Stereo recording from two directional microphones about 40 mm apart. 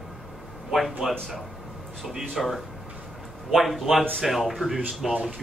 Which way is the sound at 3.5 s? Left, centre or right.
Centre.